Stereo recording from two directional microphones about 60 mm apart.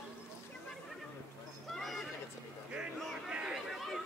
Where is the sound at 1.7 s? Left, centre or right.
Centre.